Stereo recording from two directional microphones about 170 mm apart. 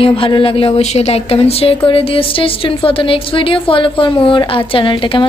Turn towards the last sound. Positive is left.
turn(degrees=30)  # may be behind; listen again after turning